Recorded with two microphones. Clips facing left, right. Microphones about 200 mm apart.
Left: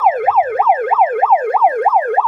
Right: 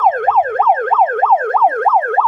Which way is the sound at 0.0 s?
10° left (ahead or behind).